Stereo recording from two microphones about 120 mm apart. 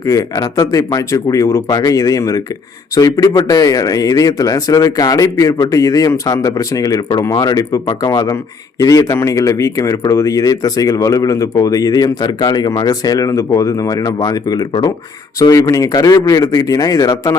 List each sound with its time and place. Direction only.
0.0 s speech: 30° left (ahead or behind)